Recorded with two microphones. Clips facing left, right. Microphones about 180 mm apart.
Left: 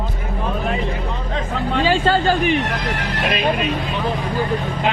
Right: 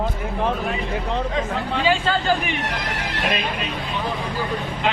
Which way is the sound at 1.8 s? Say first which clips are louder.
Left 4 dB; 45° left (ahead or behind).